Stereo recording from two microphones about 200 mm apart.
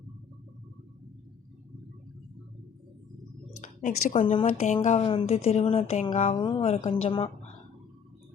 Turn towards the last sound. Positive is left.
turn(degrees=25)  # may be behind; listen again after turning